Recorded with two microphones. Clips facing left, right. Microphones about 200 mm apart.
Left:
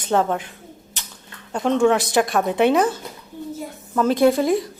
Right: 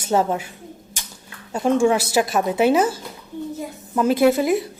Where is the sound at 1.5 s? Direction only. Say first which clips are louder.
Even; 10° right (ahead or behind).